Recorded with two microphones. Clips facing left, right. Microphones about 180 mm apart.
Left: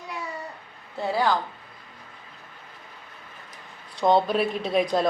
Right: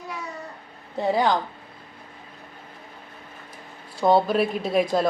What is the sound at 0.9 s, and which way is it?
Speech, 20° right (ahead or behind).